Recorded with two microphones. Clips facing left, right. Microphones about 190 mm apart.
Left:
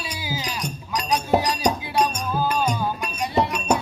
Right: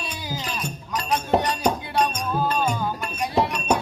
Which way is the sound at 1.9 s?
10° left (ahead or behind).